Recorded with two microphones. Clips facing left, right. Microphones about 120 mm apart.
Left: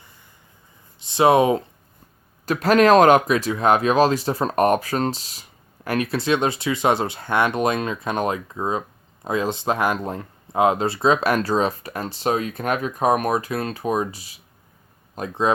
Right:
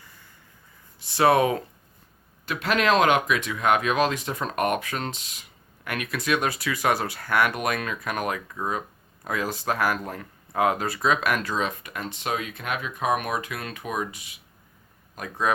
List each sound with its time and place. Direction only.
0.9 s speech: 20° left (ahead or behind)
2.5 s speech: 40° left (ahead or behind)